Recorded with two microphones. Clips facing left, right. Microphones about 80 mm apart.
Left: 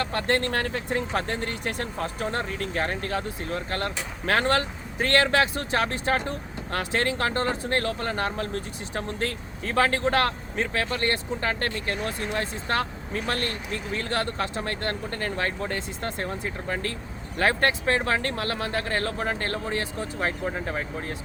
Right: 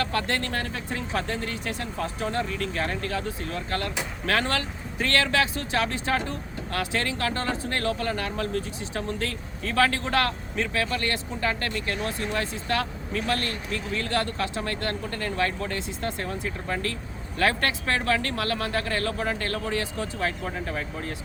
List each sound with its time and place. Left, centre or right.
0.0 s speech: left